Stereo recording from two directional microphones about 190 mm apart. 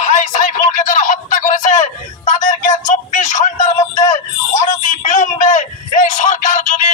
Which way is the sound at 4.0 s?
40° left (ahead or behind).